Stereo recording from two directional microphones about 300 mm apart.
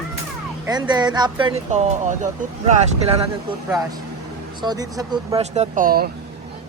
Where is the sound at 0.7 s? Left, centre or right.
Centre.